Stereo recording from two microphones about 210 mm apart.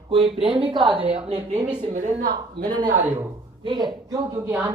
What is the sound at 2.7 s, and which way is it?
Speech, 20° right (ahead or behind).